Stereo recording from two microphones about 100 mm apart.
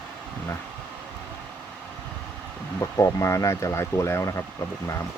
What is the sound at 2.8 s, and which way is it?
Speech, 30° left (ahead or behind).